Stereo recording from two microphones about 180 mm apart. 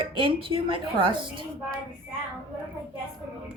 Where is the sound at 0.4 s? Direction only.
30° right (ahead or behind).